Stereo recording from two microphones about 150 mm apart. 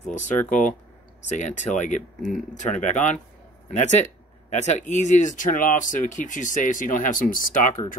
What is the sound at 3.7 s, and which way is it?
Speech, 50° left (ahead or behind).